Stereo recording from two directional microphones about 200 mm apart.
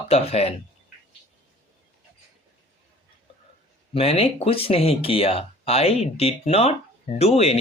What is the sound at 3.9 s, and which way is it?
Speech, 30° left (ahead or behind).